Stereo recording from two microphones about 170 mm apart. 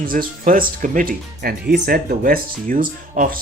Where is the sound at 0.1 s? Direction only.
55° right (ahead or behind).